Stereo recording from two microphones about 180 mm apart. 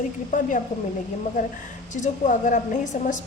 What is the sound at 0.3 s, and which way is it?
A woman's voice, 45° left (ahead or behind).